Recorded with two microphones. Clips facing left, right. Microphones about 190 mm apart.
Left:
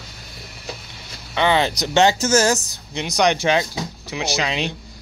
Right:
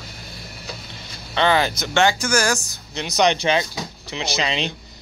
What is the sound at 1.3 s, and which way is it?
Speech, 10° left (ahead or behind).